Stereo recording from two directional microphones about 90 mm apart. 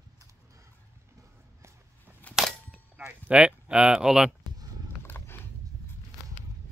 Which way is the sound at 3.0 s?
15° right (ahead or behind).